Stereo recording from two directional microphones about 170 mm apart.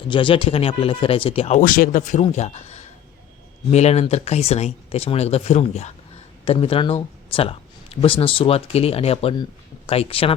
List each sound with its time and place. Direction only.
0.1 s speech: 30° left (ahead or behind)